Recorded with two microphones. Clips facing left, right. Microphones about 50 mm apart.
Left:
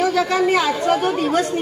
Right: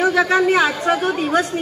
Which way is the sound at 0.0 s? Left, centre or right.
Right.